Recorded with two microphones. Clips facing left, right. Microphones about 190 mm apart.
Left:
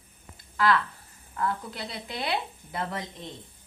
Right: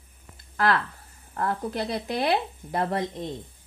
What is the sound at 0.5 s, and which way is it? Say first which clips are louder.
Speech: even; 45° right (ahead or behind).